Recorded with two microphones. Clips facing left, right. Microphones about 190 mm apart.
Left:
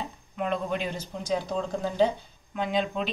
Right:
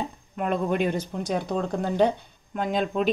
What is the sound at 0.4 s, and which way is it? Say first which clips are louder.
Speech: right 4 dB; 50° right (ahead or behind).